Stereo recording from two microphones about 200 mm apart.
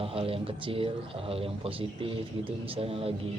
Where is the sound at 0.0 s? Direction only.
30° right (ahead or behind).